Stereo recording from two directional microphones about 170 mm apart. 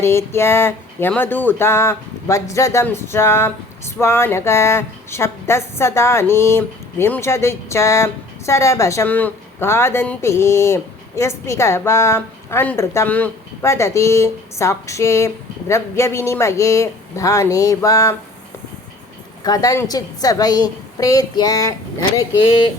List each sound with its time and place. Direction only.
0.0 s speech: 15° left (ahead or behind)
19.4 s a woman's voice: 20° left (ahead or behind)